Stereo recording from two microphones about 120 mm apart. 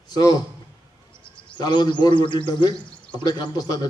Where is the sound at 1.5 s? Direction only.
35° left (ahead or behind).